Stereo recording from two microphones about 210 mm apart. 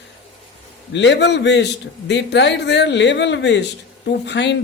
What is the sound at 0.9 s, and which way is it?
Speech, 55° left (ahead or behind).